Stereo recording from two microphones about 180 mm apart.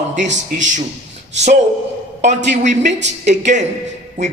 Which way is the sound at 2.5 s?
40° right (ahead or behind).